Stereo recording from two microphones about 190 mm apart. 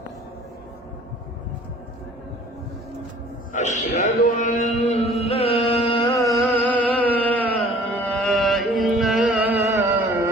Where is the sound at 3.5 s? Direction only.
40° left (ahead or behind).